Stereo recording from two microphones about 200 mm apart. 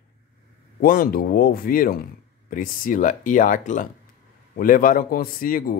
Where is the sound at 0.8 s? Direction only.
45° left (ahead or behind).